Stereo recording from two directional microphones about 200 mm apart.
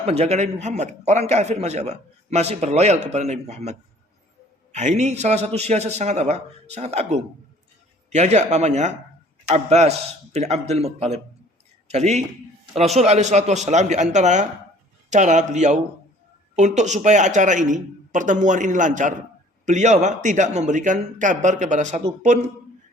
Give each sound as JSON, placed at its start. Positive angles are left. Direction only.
{"t": 0.0, "sound": "a man's voice", "side_deg": -35}